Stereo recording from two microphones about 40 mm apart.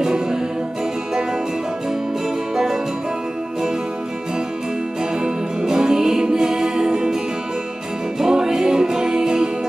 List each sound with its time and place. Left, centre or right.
0.0 s music: centre
2.5 s music: centre
5.2 s music: centre
8.2 s music: centre